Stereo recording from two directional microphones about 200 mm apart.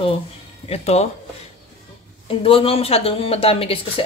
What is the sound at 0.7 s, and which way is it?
Speech, 30° left (ahead or behind).